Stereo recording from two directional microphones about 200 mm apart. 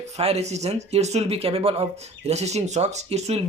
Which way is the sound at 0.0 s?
30° right (ahead or behind).